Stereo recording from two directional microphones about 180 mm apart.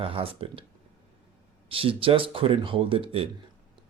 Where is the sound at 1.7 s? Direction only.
30° right (ahead or behind).